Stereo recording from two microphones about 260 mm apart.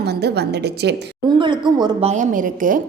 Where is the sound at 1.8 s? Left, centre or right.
Right.